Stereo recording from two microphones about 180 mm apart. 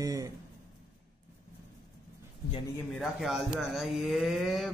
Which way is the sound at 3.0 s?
Centre (ahead or behind).